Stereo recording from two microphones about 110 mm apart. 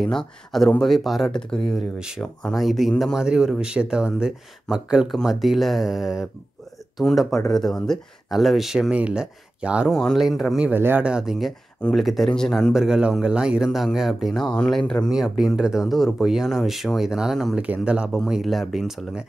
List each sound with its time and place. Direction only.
0.0 s speech: 5° left (ahead or behind)
2.0 s speech: 5° right (ahead or behind)
9.8 s speech: centre (ahead or behind)
10.7 s speech: 15° right (ahead or behind)